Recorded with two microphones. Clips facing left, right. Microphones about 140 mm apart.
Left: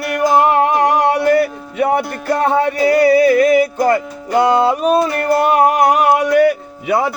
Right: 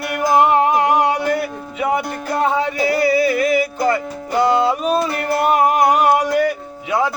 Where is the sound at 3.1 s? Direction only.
50° left (ahead or behind).